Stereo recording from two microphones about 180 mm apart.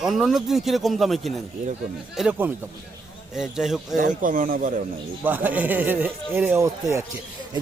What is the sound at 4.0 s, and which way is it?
Speech, 45° right (ahead or behind).